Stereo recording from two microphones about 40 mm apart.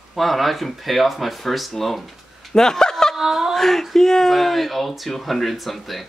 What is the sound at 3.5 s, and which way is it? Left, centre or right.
Speech, centre.